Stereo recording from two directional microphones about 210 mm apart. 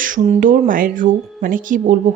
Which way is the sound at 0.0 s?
40° right (ahead or behind).